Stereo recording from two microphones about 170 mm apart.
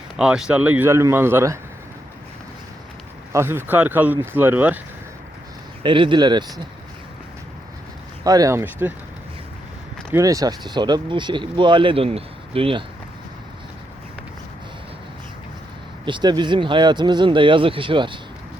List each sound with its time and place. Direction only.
0.2 s speech: 5° right (ahead or behind)
3.3 s speech: 15° right (ahead or behind)
5.8 s speech: 30° right (ahead or behind)
8.2 s speech: 20° right (ahead or behind)
10.1 s speech: 20° right (ahead or behind)
16.0 s speech: 25° right (ahead or behind)